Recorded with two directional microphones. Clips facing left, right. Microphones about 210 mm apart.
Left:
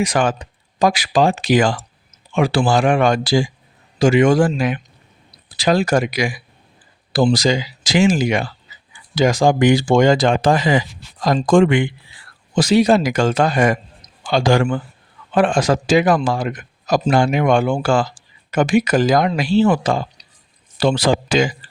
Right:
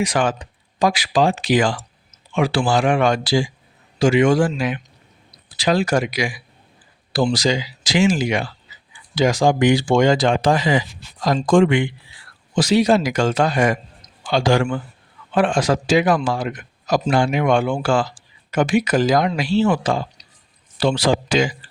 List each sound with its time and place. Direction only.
0.0 s speech: 45° left (ahead or behind)